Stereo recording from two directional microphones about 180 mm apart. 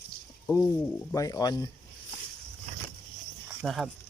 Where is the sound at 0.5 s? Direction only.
15° left (ahead or behind).